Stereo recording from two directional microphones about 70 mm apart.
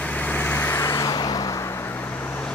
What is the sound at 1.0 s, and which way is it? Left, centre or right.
Vehicle, left.